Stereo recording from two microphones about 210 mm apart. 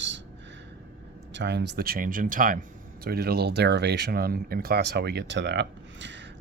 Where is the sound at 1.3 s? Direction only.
55° right (ahead or behind).